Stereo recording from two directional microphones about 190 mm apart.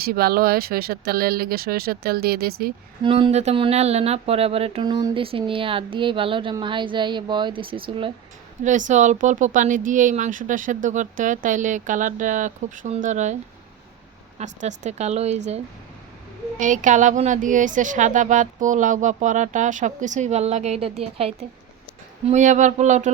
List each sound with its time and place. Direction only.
0.0 s speech: 55° right (ahead or behind)
3.0 s speech: 30° right (ahead or behind)
8.6 s speech: 40° right (ahead or behind)
14.3 s speech: 40° right (ahead or behind)
16.6 s speech: 40° right (ahead or behind)